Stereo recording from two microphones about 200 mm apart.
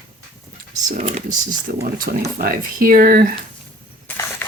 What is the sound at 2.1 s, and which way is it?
Speech, 45° right (ahead or behind).